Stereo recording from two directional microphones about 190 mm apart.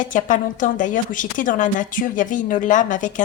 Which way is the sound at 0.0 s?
45° left (ahead or behind).